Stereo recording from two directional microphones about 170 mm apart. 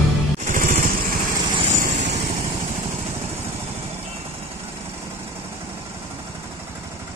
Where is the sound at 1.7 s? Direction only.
45° right (ahead or behind).